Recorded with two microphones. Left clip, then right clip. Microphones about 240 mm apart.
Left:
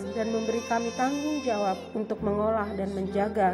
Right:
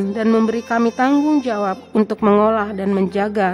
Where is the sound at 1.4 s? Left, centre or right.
Right.